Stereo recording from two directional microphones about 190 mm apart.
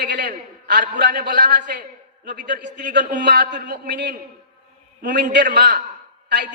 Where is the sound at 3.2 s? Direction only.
65° right (ahead or behind).